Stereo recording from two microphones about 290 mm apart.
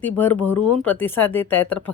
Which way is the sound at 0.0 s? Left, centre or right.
Centre.